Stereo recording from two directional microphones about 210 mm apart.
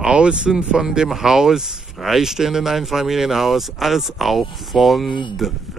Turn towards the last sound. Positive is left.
turn(degrees=0)  # may be behind; listen again after turning